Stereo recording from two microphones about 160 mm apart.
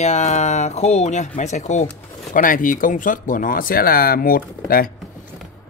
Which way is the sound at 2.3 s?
60° left (ahead or behind).